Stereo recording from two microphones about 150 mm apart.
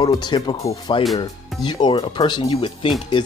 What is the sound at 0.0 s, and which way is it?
Speech, 30° left (ahead or behind).